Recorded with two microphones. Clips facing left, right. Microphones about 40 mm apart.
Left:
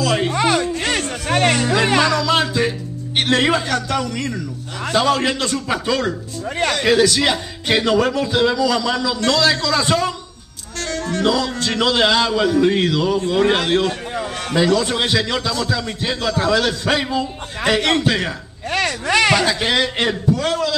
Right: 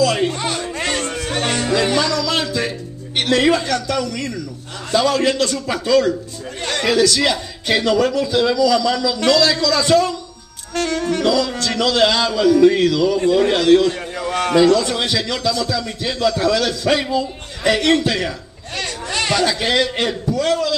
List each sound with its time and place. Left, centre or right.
0.0 s music: centre
1.3 s music: left
2.0 s music: left
2.2 s music: centre
3.2 s a man's voice: centre
10.8 s music: right
11.2 s a man's voice: centre
18.7 s a sound: left
19.3 s a man's voice: centre